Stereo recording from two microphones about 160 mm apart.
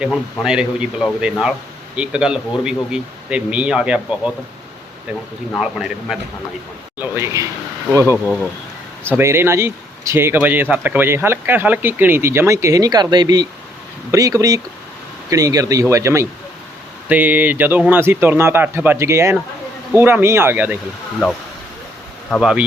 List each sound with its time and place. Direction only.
0.4 s a man's voice: 5° right (ahead or behind)
5.5 s a man's voice: 5° right (ahead or behind)
7.0 s speech: 15° right (ahead or behind)
8.2 s a man's voice: centre (ahead or behind)
9.1 s speech: 15° right (ahead or behind)
22.3 s a man's voice: 5° right (ahead or behind)